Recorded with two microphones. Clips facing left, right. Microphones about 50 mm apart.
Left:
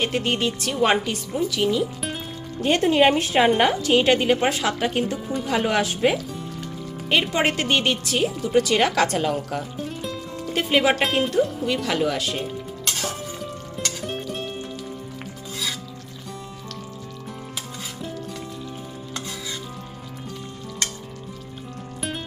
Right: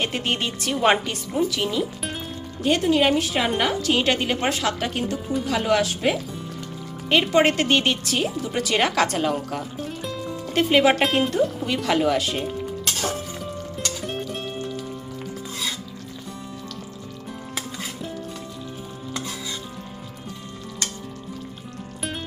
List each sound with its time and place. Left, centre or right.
0.0 s speech: centre
2.6 s a woman's voice: left; by 5.5 s centre
5.5 s a woman's voice: centre
7.1 s speech: centre
13.0 s music: centre